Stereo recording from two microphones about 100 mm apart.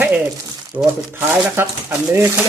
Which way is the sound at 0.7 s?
30° right (ahead or behind).